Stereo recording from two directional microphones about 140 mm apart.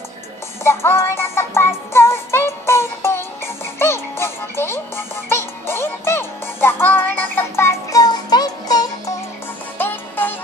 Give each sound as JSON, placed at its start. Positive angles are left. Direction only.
{"t": 0.7, "sound": "music", "side_deg": 20}
{"t": 9.8, "sound": "music", "side_deg": 15}